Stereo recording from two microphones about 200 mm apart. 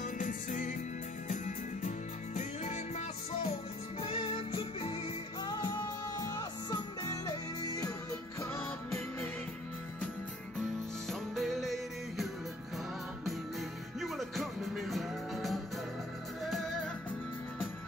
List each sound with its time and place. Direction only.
0.0 s music: 40° left (ahead or behind); by 9.3 s 10° left (ahead or behind)
11.1 s music: centre (ahead or behind)